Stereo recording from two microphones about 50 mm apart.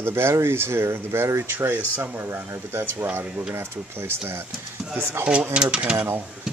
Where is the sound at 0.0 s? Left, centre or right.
Right.